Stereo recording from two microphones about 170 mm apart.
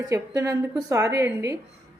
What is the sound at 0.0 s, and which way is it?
A woman's voice, 20° right (ahead or behind).